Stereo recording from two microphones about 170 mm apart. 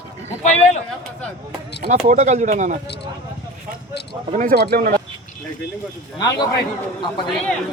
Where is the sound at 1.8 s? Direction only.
40° right (ahead or behind).